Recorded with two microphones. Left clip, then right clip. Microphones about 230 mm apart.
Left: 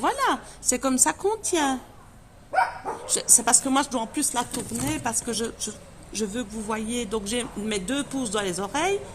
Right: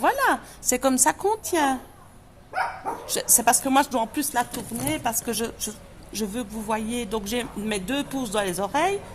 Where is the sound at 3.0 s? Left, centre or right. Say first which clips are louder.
Right 2 dB; right.